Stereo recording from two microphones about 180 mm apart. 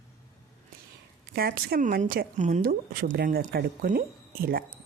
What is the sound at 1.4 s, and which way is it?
Speech, 55° right (ahead or behind).